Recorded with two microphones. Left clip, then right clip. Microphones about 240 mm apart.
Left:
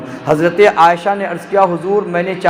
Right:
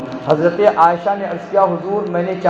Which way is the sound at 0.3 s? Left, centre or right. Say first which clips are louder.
Left 3 dB; left.